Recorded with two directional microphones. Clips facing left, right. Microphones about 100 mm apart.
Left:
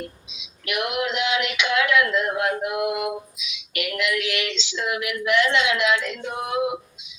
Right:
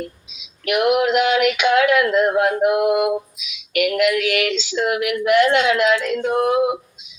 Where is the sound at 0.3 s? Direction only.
50° right (ahead or behind).